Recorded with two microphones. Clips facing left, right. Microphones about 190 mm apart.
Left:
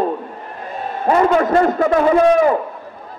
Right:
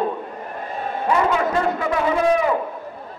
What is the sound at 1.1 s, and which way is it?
Speech, 45° left (ahead or behind).